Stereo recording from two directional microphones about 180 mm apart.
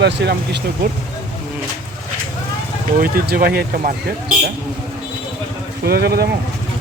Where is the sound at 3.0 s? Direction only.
55° right (ahead or behind).